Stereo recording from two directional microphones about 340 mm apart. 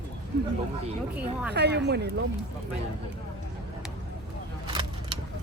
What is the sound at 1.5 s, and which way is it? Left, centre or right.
Speech, right.